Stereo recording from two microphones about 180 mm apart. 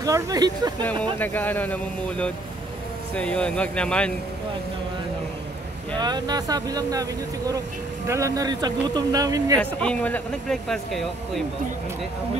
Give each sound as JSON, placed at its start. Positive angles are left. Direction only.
{"t": 0.0, "sound": "speech", "side_deg": -20}
{"t": 1.1, "sound": "speech", "side_deg": 10}
{"t": 5.9, "sound": "speech", "side_deg": -25}
{"t": 9.6, "sound": "speech", "side_deg": 5}